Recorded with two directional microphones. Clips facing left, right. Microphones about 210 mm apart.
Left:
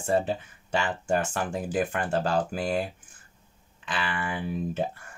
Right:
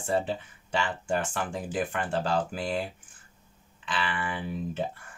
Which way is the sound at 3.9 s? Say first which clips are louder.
Left 1 dB; 45° left (ahead or behind).